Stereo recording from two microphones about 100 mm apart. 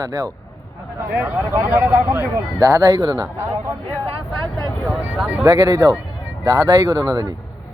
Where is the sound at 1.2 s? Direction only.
20° right (ahead or behind); by 3.2 s 40° right (ahead or behind).